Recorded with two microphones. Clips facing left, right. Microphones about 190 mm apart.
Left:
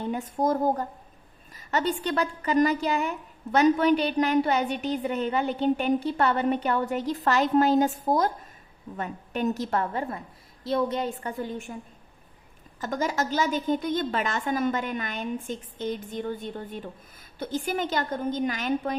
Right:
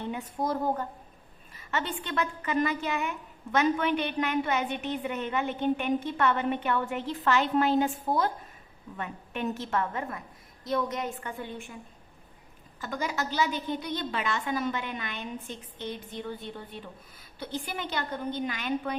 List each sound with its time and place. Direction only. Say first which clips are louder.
0.0 s a woman's voice: left 5 dB; 45° left (ahead or behind)
12.8 s a woman's voice: left 5 dB; 45° left (ahead or behind)